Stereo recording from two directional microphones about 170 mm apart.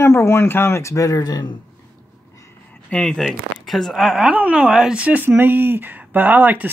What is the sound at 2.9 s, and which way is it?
Speech, 5° left (ahead or behind).